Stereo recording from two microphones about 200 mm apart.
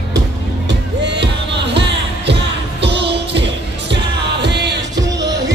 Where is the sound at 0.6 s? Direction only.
60° right (ahead or behind).